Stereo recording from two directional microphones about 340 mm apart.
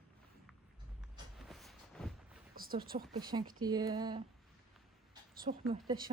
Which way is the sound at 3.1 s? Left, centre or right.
Centre.